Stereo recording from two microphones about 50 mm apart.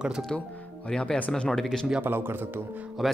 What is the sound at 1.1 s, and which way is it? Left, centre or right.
Speech, centre.